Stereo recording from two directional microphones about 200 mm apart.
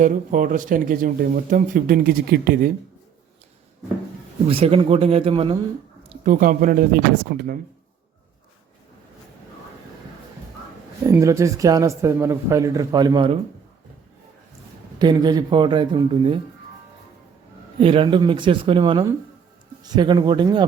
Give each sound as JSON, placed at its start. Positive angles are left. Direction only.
{"t": 0.0, "sound": "speech", "side_deg": -40}
{"t": 4.4, "sound": "speech", "side_deg": -30}
{"t": 6.1, "sound": "speech", "side_deg": -40}
{"t": 11.0, "sound": "speech", "side_deg": -15}
{"t": 14.9, "sound": "speech", "side_deg": -20}
{"t": 17.7, "sound": "speech", "side_deg": -25}